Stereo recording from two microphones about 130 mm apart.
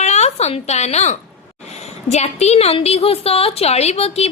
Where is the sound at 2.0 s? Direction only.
60° left (ahead or behind).